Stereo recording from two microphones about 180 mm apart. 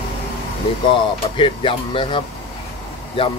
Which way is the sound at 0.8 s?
30° left (ahead or behind).